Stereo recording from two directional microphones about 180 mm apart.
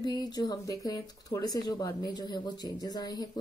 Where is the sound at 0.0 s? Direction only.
20° left (ahead or behind).